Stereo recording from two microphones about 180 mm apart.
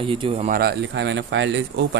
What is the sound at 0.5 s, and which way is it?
Speech, 65° right (ahead or behind).